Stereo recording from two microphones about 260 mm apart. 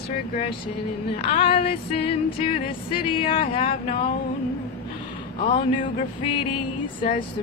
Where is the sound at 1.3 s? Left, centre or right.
Left.